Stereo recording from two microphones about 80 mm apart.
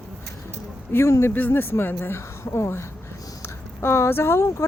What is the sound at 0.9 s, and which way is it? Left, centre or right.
Speech, left.